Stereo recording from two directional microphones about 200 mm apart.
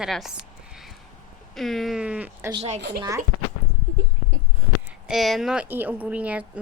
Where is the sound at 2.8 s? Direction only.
55° right (ahead or behind).